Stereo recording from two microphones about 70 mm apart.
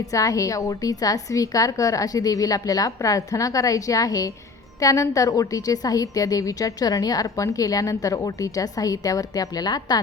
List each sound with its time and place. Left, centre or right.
0.0 s a woman's voice: left